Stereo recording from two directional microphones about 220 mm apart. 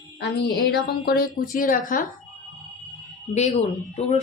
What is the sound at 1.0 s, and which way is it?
Speech, 40° left (ahead or behind).